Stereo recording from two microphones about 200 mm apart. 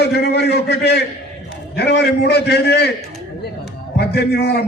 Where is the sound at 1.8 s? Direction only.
55° left (ahead or behind).